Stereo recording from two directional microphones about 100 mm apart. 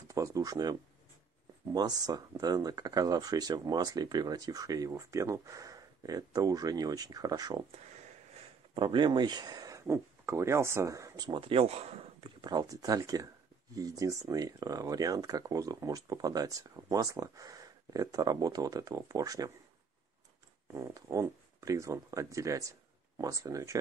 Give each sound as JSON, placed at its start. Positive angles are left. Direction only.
{"t": 0.1, "sound": "speech", "side_deg": -35}
{"t": 8.7, "sound": "speech", "side_deg": -55}
{"t": 11.2, "sound": "speech", "side_deg": -60}
{"t": 12.2, "sound": "a sound", "side_deg": -55}
{"t": 12.5, "sound": "speech", "side_deg": -35}
{"t": 20.7, "sound": "speech", "side_deg": -35}